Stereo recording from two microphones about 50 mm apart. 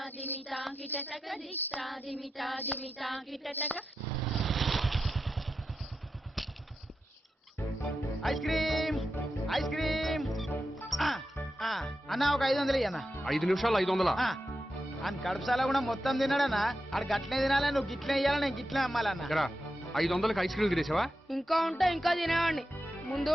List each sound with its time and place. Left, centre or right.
0.7 s speech: left
1.7 s speech: centre
2.6 s speech: left
3.0 s speech: centre
3.5 s speech: left
4.3 s vehicle: centre
8.2 s speech: centre
9.5 s music: centre
13.2 s speech: centre